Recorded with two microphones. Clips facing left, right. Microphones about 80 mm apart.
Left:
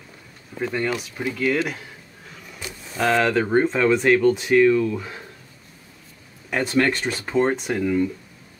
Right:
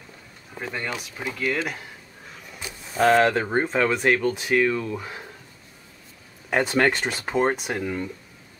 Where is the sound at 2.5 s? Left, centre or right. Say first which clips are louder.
Right 2 dB; centre.